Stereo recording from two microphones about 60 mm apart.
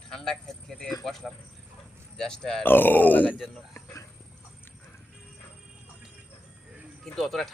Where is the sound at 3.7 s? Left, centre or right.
Left.